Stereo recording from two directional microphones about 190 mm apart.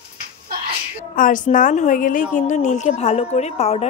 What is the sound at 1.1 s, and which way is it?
A woman's voice, 45° left (ahead or behind).